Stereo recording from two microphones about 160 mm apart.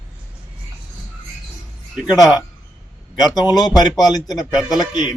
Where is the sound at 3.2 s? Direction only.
25° left (ahead or behind).